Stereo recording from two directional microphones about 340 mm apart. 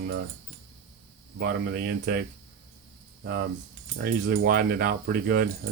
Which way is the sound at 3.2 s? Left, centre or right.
Right.